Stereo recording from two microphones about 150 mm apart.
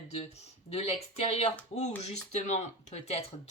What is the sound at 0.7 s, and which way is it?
Speech, 40° left (ahead or behind).